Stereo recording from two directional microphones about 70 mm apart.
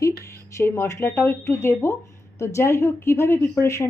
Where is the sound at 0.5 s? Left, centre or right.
Left.